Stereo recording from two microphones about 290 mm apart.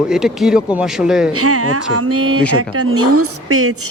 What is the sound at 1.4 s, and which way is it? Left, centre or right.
A woman's voice, right.